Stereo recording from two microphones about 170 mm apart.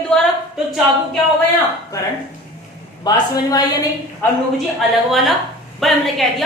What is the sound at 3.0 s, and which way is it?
Speech, 20° left (ahead or behind).